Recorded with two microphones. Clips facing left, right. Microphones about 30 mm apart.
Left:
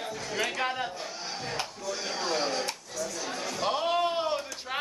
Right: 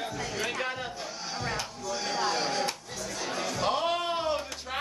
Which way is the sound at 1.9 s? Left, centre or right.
Centre.